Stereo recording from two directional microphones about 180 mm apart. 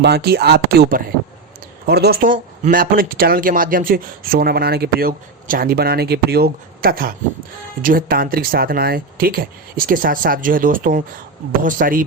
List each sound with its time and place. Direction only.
0.0 s speech: 65° right (ahead or behind)